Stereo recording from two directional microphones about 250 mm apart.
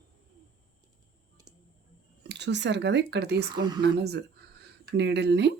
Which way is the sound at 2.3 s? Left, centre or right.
Right.